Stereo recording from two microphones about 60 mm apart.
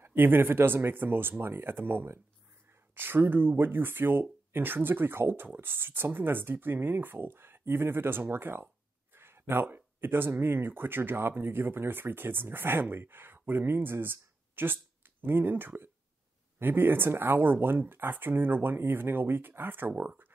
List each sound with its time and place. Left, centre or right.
0.0 s speech: right